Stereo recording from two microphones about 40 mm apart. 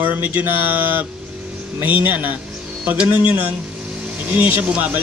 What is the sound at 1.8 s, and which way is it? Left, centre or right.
Speech, right.